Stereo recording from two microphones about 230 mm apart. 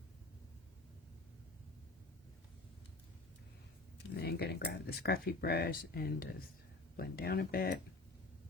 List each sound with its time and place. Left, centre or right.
4.2 s speech: left